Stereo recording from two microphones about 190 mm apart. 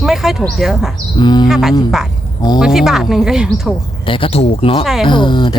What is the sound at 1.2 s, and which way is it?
Speech, 20° left (ahead or behind).